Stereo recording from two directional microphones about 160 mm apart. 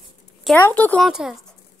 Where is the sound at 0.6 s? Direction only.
10° left (ahead or behind).